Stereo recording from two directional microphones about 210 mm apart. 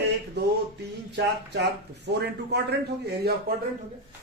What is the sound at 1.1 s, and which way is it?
Speech, 55° right (ahead or behind).